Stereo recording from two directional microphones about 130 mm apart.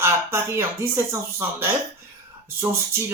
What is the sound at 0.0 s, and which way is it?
Speech, 20° right (ahead or behind).